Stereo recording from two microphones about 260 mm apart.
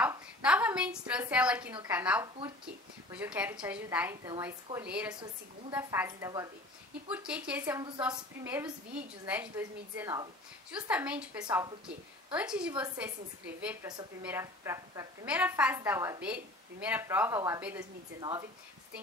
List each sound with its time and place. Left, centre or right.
0.0 s a sound: centre
2.2 s a woman's voice: centre
2.6 s a woman's voice: centre
12.3 s speech: centre
14.2 s a woman's voice: centre